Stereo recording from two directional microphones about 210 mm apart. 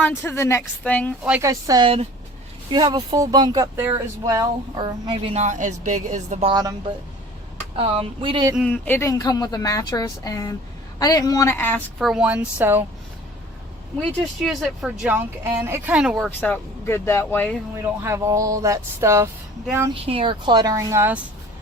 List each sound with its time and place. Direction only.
0.0 s a woman's voice: 10° left (ahead or behind)
1.2 s speech: 10° right (ahead or behind); by 6.5 s 35° right (ahead or behind)
6.5 s speech: 15° right (ahead or behind)
7.8 s speech: 25° right (ahead or behind)
8.5 s a woman's voice: 5° left (ahead or behind)
14.0 s speech: centre (ahead or behind)
18.0 s speech: 15° right (ahead or behind)
19.9 s speech: 25° right (ahead or behind)